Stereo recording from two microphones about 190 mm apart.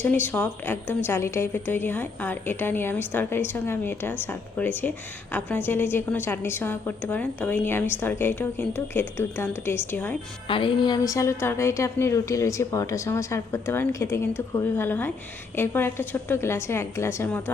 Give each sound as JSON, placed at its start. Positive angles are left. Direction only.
{"t": 0.0, "sound": "a woman's voice", "side_deg": 10}
{"t": 10.5, "sound": "a woman's voice", "side_deg": 25}